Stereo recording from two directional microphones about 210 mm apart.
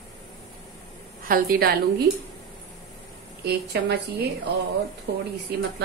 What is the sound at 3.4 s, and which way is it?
A woman's voice, 50° right (ahead or behind).